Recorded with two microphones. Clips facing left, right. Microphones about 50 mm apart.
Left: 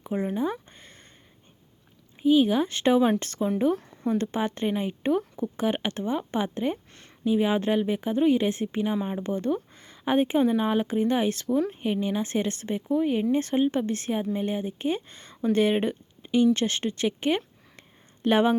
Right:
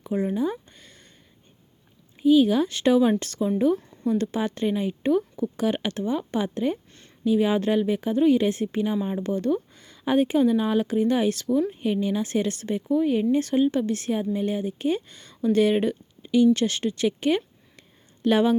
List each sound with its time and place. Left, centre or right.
0.0 s speech: left
2.2 s speech: left
17.7 s a sound: left